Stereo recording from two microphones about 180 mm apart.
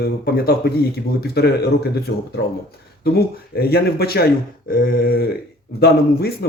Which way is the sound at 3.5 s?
60° left (ahead or behind).